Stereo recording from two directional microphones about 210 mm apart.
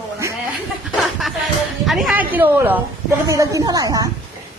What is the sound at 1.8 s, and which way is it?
A woman's voice, centre (ahead or behind).